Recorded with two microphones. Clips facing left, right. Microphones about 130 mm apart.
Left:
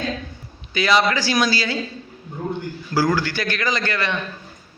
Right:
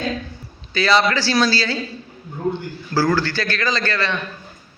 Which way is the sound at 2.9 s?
15° left (ahead or behind).